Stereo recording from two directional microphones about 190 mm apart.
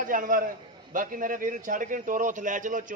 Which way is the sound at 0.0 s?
45° right (ahead or behind).